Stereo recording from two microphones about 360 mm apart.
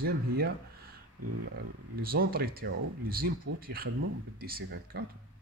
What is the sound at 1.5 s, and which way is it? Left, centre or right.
Speech, right.